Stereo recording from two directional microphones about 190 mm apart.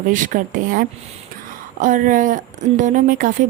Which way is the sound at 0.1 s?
45° right (ahead or behind).